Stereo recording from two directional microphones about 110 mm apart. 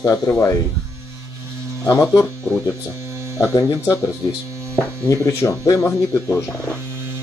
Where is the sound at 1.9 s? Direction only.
25° left (ahead or behind).